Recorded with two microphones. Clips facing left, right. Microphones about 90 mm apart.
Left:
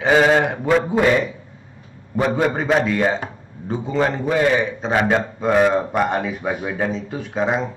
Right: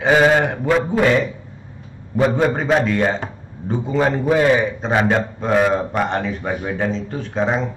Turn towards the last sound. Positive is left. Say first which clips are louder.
# right 1 dB
turn(degrees=5)  # may be behind; listen again after turning